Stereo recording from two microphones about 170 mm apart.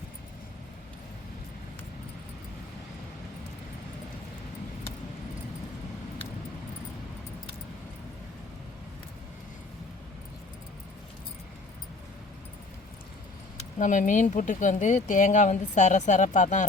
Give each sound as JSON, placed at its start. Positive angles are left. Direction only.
{"t": 13.6, "sound": "speech", "side_deg": 45}